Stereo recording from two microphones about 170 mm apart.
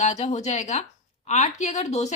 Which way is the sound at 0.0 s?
40° left (ahead or behind).